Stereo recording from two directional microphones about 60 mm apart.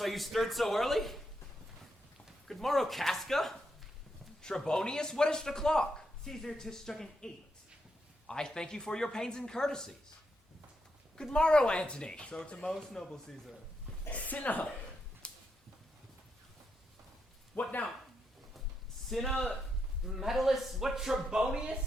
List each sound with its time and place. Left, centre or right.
0.0 s a man's voice: centre
2.5 s a man's voice: centre
8.3 s speech: centre
11.2 s speech: centre
14.1 s a woman's voice: left
15.2 s a sound: centre
17.5 s speech: left
19.0 s speech: centre
19.3 s a woman's voice: left
20.1 s a man's voice: centre